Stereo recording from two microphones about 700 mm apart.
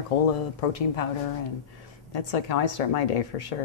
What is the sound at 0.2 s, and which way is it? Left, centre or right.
Speech, left.